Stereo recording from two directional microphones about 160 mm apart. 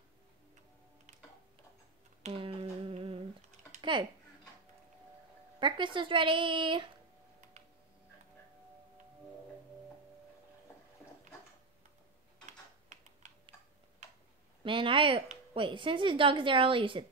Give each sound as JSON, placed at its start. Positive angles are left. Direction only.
{"t": 2.2, "sound": "humming", "side_deg": -35}
{"t": 5.6, "sound": "a woman's voice", "side_deg": -30}
{"t": 14.6, "sound": "a woman's voice", "side_deg": -30}